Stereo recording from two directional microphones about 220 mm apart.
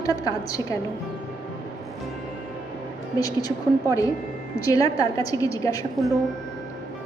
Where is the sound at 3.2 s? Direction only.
15° left (ahead or behind).